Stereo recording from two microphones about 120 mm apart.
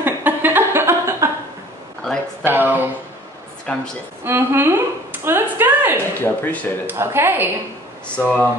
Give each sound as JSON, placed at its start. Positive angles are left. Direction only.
{"t": 0.0, "sound": "a sound", "side_deg": -15}
{"t": 2.4, "sound": "a woman's voice", "side_deg": -15}
{"t": 3.7, "sound": "speech", "side_deg": 10}
{"t": 4.2, "sound": "a woman's voice", "side_deg": -20}
{"t": 6.1, "sound": "speech", "side_deg": 15}
{"t": 6.9, "sound": "a woman's voice", "side_deg": -20}
{"t": 8.2, "sound": "speech", "side_deg": 15}